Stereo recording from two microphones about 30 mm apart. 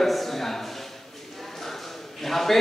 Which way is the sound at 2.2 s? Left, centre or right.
Centre.